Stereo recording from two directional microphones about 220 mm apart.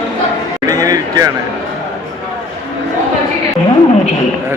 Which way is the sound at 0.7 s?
15° right (ahead or behind).